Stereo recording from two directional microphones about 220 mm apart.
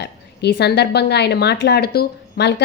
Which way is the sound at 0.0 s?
50° left (ahead or behind).